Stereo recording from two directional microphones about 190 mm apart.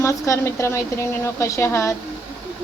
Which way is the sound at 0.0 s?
15° left (ahead or behind).